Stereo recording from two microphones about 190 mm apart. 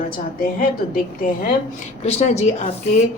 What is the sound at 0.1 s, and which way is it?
A woman's voice, 50° left (ahead or behind).